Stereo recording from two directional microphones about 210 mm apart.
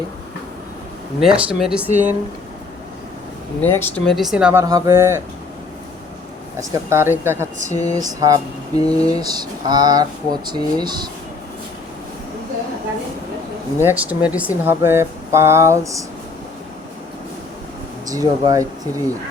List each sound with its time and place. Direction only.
1.2 s speech: centre (ahead or behind)
3.6 s speech: 10° left (ahead or behind); by 5.2 s 10° right (ahead or behind)
6.6 s speech: 10° right (ahead or behind)
7.7 s a sound: 30° left (ahead or behind)
7.9 s speech: 15° right (ahead or behind)
13.8 s speech: 5° right (ahead or behind)
18.1 s speech: 15° right (ahead or behind)